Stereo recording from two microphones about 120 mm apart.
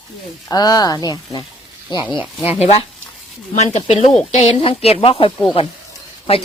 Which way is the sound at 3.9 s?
65° left (ahead or behind).